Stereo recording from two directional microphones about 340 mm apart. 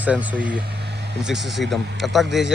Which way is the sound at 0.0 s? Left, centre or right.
Centre.